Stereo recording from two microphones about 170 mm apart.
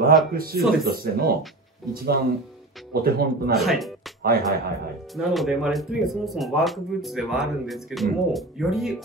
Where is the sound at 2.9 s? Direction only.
65° right (ahead or behind).